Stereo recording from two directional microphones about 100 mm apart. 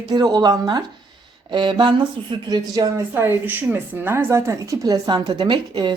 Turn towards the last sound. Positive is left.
turn(degrees=-50)  # may be behind; listen again after turning